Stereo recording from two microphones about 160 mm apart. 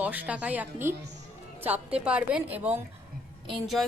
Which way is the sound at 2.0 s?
10° right (ahead or behind).